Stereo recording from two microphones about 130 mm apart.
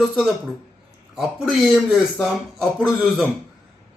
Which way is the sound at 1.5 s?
Centre (ahead or behind).